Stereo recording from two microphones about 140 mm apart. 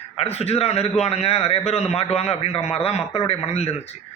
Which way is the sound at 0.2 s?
50° left (ahead or behind).